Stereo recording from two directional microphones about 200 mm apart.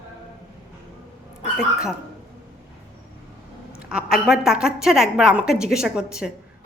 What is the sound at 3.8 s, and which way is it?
A woman's voice, 5° right (ahead or behind).